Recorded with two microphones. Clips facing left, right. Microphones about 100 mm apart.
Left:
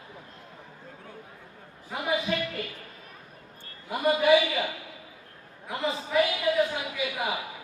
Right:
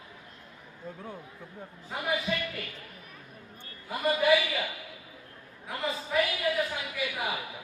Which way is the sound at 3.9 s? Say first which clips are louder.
Left 3 dB; 20° left (ahead or behind).